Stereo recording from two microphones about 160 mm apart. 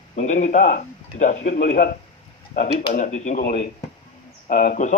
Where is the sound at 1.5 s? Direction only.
65° left (ahead or behind).